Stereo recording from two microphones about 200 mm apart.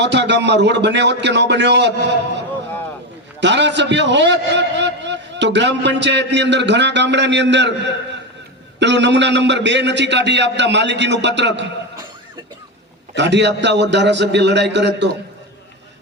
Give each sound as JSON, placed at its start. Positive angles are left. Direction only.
{"t": 0.0, "sound": "a man's voice", "side_deg": -60}
{"t": 3.4, "sound": "a man's voice", "side_deg": -60}
{"t": 13.1, "sound": "a man's voice", "side_deg": -60}